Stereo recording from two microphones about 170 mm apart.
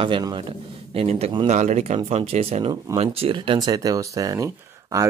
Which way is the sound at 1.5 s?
45° right (ahead or behind).